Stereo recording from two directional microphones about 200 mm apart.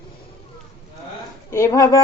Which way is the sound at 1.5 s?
15° left (ahead or behind).